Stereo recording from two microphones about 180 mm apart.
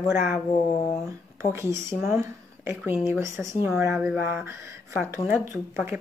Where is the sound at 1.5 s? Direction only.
15° right (ahead or behind).